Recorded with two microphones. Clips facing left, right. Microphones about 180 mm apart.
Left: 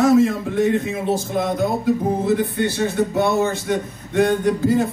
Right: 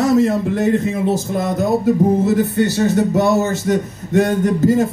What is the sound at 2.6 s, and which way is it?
Speech, 40° right (ahead or behind).